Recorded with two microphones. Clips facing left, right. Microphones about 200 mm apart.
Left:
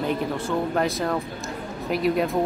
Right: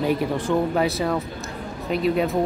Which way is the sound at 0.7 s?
5° right (ahead or behind).